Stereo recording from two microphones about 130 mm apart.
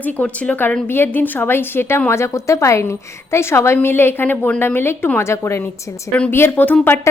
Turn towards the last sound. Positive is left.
turn(degrees=15)  # may be behind; listen again after turning